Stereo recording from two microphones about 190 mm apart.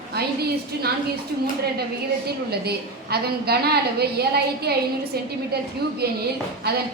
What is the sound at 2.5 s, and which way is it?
A woman's voice, 55° right (ahead or behind).